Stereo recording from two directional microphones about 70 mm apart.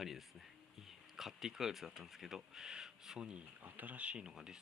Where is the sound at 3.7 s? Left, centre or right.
Right.